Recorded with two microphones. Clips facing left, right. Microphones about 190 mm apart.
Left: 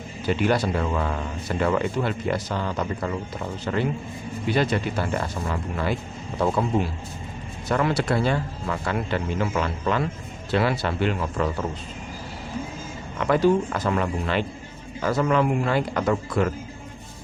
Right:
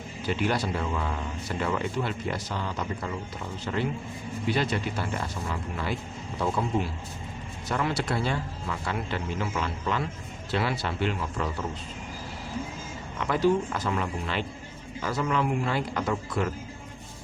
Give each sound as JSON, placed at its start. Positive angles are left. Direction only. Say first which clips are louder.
{"t": 0.3, "sound": "a man's voice", "louder": "left 5 dB", "side_deg": 55}
{"t": 4.5, "sound": "a man's voice", "louder": "left 7 dB", "side_deg": 50}
{"t": 7.7, "sound": "a man's voice", "louder": "left 6 dB", "side_deg": 65}
{"t": 13.1, "sound": "a man's voice", "louder": "left 4 dB", "side_deg": 60}